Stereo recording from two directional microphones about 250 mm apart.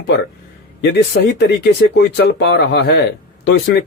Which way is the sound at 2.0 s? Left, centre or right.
Left.